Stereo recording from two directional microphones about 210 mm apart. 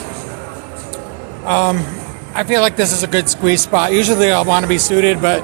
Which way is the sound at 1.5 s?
15° right (ahead or behind).